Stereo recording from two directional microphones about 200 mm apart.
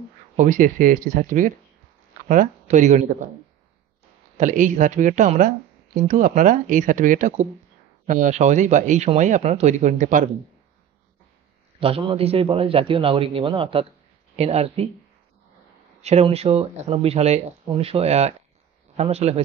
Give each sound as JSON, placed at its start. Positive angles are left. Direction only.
{"t": 0.4, "sound": "speech", "side_deg": -40}
{"t": 4.4, "sound": "speech", "side_deg": -40}
{"t": 11.8, "sound": "a man's voice", "side_deg": -25}
{"t": 16.0, "sound": "speech", "side_deg": -30}